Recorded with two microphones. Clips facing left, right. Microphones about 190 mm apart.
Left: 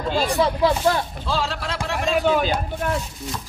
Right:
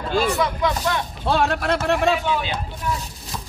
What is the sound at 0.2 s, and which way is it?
Speech, 30° left (ahead or behind).